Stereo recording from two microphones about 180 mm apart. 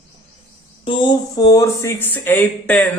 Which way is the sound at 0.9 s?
25° left (ahead or behind).